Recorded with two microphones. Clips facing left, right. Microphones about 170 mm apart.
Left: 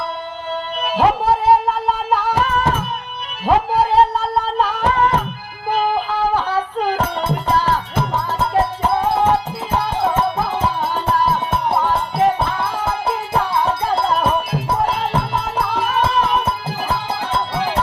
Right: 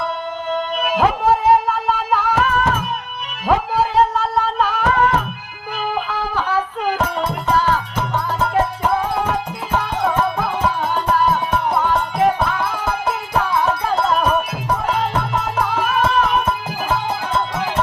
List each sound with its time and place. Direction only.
0.5 s music: 35° left (ahead or behind)